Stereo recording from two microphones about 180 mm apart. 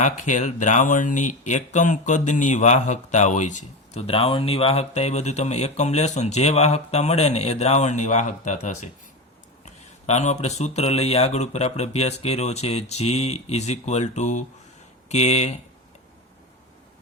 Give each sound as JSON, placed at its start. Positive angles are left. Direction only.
{"t": 0.0, "sound": "speech", "side_deg": 45}